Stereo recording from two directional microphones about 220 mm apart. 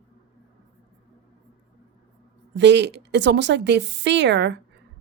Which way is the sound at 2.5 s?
55° right (ahead or behind).